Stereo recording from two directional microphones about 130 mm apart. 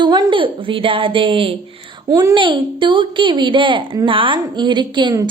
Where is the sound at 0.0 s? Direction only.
35° right (ahead or behind).